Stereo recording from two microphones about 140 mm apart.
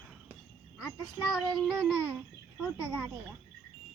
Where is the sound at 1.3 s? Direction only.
5° right (ahead or behind).